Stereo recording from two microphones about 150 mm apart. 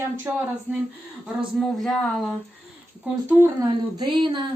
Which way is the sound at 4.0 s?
30° right (ahead or behind).